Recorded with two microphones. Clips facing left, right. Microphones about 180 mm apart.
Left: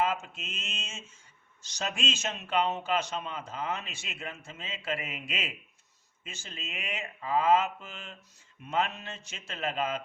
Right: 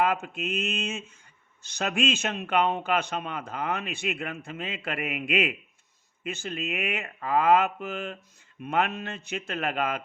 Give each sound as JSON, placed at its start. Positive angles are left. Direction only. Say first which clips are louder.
{"t": 0.0, "sound": "speech", "louder": "right 4 dB", "side_deg": -60}